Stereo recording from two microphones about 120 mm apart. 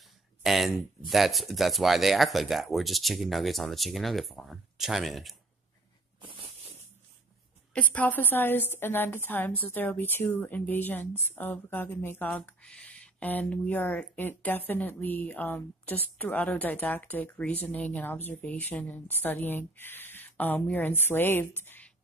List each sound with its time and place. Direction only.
0.4 s speech: centre (ahead or behind)
7.7 s speech: 10° left (ahead or behind)